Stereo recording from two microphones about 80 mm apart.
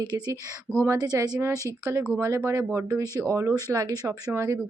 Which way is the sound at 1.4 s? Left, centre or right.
Right.